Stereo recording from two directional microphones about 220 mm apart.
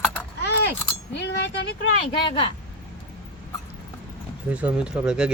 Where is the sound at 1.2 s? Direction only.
50° left (ahead or behind).